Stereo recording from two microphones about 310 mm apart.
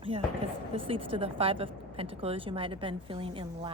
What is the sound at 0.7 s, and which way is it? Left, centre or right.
Speech, centre.